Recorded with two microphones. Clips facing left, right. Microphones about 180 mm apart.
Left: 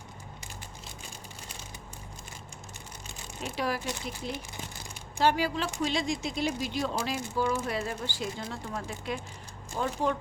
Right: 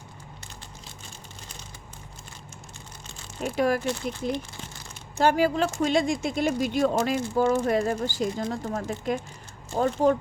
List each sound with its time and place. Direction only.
3.4 s speech: 50° right (ahead or behind)
5.2 s speech: 50° right (ahead or behind)